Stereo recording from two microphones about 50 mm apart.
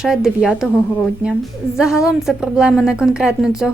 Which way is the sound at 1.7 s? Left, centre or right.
Centre.